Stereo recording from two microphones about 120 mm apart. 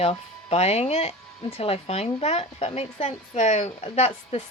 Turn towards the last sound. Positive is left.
turn(degrees=60)  # may be behind; listen again after turning